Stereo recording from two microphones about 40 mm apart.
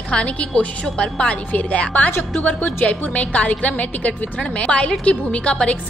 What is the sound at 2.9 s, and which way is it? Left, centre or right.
A woman's voice, left.